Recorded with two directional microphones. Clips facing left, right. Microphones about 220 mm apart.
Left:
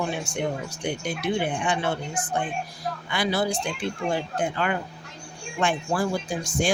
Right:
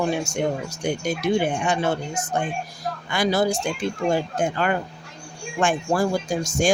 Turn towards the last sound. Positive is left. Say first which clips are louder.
# right 4 dB
turn(degrees=-45)  # may be behind; listen again after turning